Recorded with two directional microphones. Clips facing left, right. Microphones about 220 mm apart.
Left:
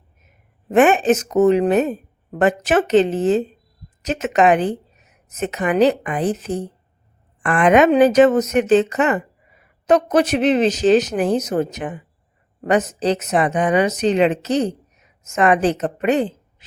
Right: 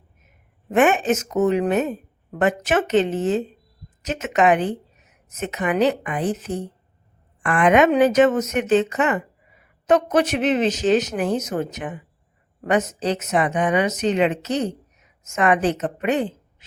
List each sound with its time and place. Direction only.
0.7 s a woman's voice: 35° left (ahead or behind)